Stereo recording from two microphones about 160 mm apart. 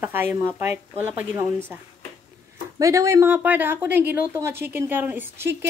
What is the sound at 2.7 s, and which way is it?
A woman's voice, 20° right (ahead or behind).